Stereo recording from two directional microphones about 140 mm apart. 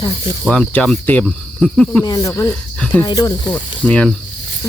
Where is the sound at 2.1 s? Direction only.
25° left (ahead or behind).